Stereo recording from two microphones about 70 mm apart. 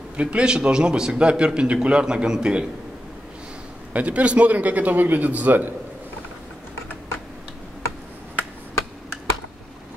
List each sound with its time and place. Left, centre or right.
0.2 s a man's voice: centre
3.9 s a man's voice: centre